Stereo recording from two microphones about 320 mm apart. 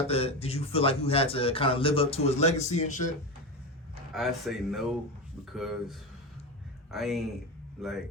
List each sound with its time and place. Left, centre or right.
0.1 s a man's voice: centre
4.1 s speech: centre